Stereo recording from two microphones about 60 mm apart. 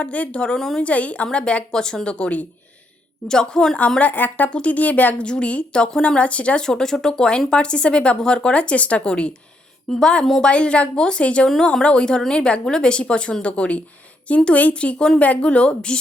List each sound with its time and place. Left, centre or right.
0.0 s a woman's voice: left
3.2 s speech: centre
3.8 s a woman's voice: left
5.2 s a woman's voice: centre
6.7 s a woman's voice: centre